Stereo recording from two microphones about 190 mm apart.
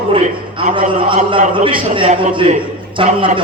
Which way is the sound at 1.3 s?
25° right (ahead or behind).